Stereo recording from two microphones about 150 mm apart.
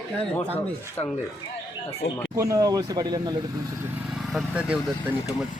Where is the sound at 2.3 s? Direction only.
20° right (ahead or behind).